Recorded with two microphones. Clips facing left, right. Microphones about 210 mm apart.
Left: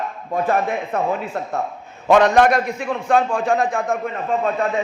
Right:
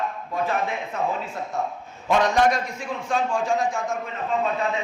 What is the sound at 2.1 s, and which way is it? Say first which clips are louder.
A man's voice: left 6 dB; 60° left (ahead or behind).